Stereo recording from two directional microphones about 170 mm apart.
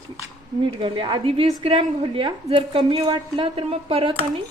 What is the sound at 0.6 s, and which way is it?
A woman's voice, 30° right (ahead or behind).